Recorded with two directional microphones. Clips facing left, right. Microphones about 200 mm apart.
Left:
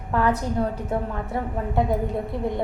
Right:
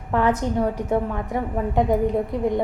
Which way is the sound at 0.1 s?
20° right (ahead or behind).